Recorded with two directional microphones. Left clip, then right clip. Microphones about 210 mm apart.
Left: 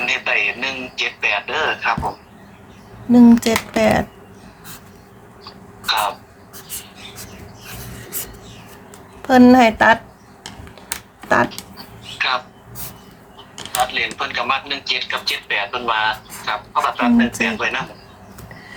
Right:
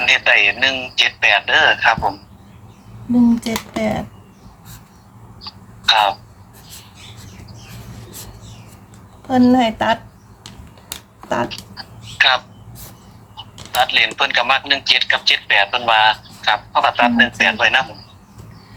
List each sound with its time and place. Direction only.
0.0 s a man's voice: 45° right (ahead or behind)
3.1 s speech: 30° left (ahead or behind)
5.5 s a sound: 45° right (ahead or behind)
9.2 s speech: 30° left (ahead or behind); by 10.0 s 15° left (ahead or behind)
12.1 s a sound: 45° right (ahead or behind)
13.8 s a man's voice: 45° right (ahead or behind)